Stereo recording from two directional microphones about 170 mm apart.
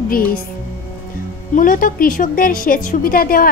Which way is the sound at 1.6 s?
50° left (ahead or behind).